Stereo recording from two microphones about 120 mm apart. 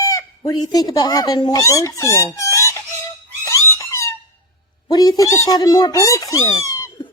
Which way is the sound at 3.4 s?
25° left (ahead or behind).